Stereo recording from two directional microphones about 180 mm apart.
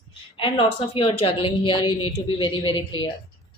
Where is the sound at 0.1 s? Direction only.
30° left (ahead or behind).